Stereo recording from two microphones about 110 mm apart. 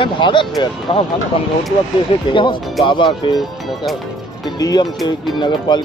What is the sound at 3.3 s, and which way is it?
Speech, centre (ahead or behind).